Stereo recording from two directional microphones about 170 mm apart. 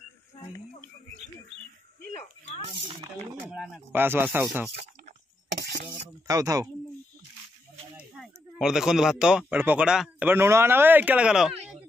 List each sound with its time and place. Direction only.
3.4 s speech: centre (ahead or behind)
3.9 s speech: 10° right (ahead or behind)
5.5 s a sound: 90° right
6.2 s speech: 20° right (ahead or behind)
8.0 s speech: centre (ahead or behind)